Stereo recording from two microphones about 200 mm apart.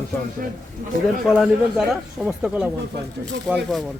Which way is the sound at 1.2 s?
Centre (ahead or behind).